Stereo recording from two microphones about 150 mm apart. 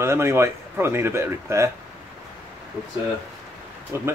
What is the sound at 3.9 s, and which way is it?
Speech, 15° right (ahead or behind).